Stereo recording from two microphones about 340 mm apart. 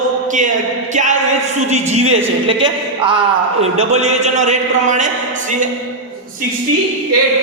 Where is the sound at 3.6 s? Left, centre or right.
Centre.